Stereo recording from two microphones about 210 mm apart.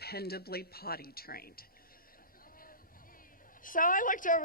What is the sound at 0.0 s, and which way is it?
Speech, 50° left (ahead or behind).